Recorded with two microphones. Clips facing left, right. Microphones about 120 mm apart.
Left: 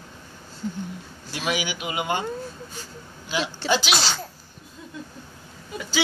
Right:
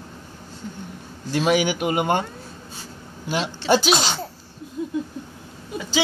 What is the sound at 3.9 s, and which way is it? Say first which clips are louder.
Speech: right 3 dB; 20° right (ahead or behind).